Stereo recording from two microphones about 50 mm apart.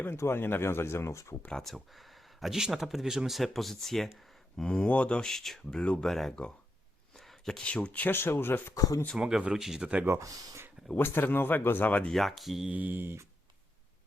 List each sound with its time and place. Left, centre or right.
0.3 s speech: left
1.6 s speech: centre
4.5 s speech: centre
5.2 s speech: centre
7.2 s a sound: centre
7.6 s speech: left
8.0 s speech: left
9.1 s speech: centre
9.8 s speech: right
10.1 s speech: right
10.9 s speech: left
12.1 s speech: centre
12.7 s a sound: right